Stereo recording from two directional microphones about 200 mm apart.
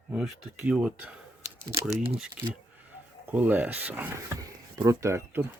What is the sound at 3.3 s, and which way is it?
Speech, 10° right (ahead or behind).